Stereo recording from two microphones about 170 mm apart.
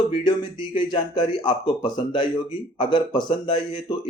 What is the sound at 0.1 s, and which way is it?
Speech, 30° left (ahead or behind).